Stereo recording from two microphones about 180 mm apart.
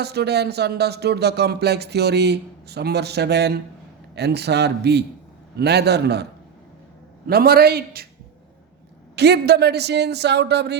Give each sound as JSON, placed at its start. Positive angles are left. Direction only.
{"t": 0.0, "sound": "speech", "side_deg": -65}
{"t": 7.3, "sound": "speech", "side_deg": -60}
{"t": 9.1, "sound": "speech", "side_deg": -65}